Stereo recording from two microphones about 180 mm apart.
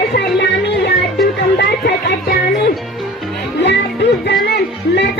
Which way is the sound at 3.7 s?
70° left (ahead or behind).